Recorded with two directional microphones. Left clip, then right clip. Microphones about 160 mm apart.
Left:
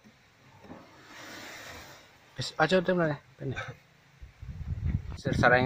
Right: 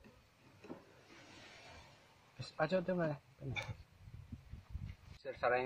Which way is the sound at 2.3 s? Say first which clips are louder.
Left 11 dB; 25° left (ahead or behind).